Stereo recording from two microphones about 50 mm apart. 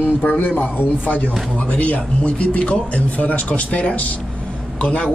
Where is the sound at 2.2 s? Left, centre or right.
Left.